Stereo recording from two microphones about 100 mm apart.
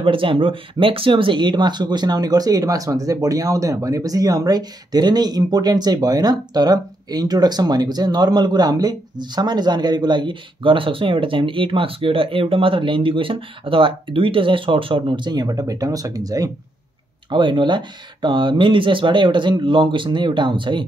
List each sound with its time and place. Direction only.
0.0 s speech: 60° right (ahead or behind); by 16.4 s 40° right (ahead or behind)
17.3 s speech: 55° right (ahead or behind)